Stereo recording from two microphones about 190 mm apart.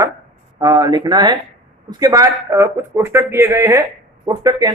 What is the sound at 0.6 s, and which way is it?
Speech, 20° right (ahead or behind).